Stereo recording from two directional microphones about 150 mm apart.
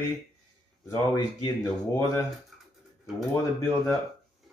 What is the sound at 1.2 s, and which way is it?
Speech, 30° left (ahead or behind).